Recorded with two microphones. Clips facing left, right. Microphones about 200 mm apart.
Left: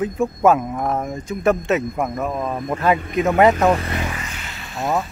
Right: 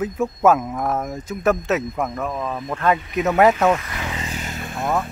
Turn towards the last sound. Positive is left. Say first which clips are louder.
# right 5 dB
turn(degrees=-50)  # may be behind; listen again after turning